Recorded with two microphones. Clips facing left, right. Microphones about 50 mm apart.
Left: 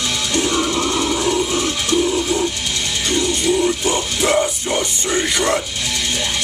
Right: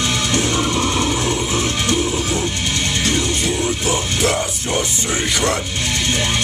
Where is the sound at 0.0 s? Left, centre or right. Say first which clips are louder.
Right 2 dB; right.